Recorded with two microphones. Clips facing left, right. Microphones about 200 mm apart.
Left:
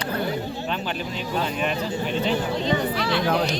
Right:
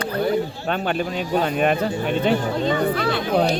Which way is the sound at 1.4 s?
55° right (ahead or behind).